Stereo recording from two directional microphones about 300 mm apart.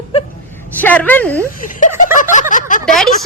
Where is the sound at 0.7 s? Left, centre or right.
Centre.